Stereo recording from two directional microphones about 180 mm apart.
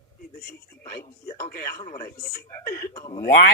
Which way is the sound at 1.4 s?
55° left (ahead or behind).